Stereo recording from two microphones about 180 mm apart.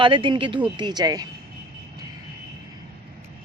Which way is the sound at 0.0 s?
30° right (ahead or behind).